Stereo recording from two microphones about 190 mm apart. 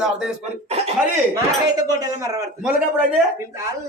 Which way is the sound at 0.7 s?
30° right (ahead or behind).